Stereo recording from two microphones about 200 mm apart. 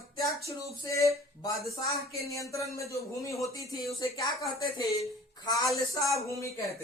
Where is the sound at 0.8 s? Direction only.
15° left (ahead or behind).